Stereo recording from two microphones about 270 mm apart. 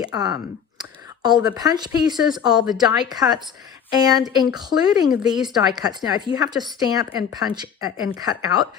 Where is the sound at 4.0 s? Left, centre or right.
Centre.